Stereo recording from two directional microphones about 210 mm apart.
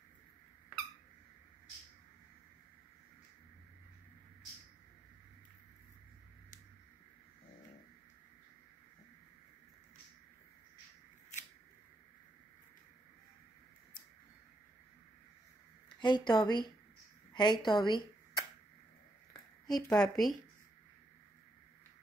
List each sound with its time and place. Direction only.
16.0 s a woman's voice: 20° left (ahead or behind)
19.6 s speech: centre (ahead or behind)